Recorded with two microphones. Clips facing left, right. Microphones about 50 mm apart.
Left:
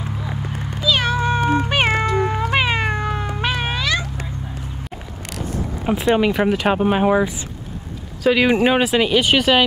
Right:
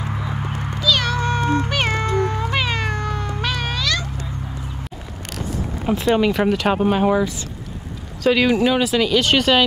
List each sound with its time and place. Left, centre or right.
0.4 s cat: right
0.7 s cat: centre
5.4 s speech: centre
8.2 s speech: centre
8.5 s speech: left; by 9.6 s centre